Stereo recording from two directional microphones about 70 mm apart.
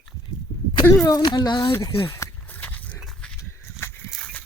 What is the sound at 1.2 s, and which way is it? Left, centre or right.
Speech, left.